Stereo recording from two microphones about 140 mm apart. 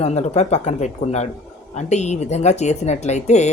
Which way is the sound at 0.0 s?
50° left (ahead or behind).